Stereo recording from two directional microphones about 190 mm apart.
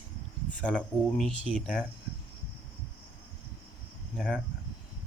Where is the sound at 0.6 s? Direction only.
5° left (ahead or behind).